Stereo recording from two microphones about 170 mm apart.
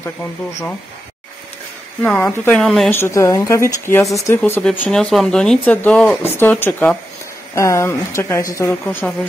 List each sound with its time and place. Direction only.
0.0 s speech: 15° left (ahead or behind)
2.0 s speech: 5° left (ahead or behind)
2.9 s speech: 15° left (ahead or behind)